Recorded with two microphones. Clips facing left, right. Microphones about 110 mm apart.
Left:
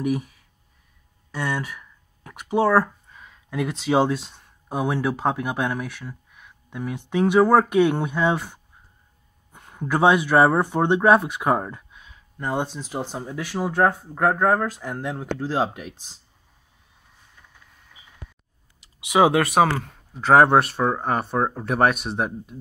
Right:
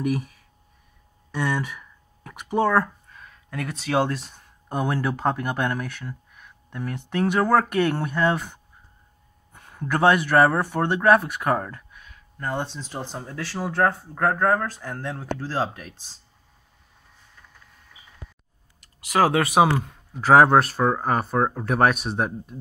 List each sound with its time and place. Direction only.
0.0 s speech: 5° left (ahead or behind)
1.3 s a sound: centre (ahead or behind)
5.1 s speech: 5° left (ahead or behind)
9.6 s speech: 5° left (ahead or behind)
19.0 s speech: centre (ahead or behind)